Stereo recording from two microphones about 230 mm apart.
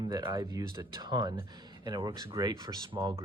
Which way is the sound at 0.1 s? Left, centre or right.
Centre.